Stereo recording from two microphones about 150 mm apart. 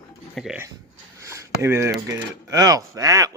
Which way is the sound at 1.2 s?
20° right (ahead or behind).